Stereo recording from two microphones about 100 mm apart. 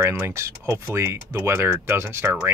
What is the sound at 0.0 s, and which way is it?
Speech, 25° right (ahead or behind).